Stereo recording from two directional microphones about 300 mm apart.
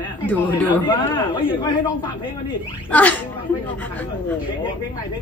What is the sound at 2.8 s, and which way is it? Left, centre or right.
Speech, centre.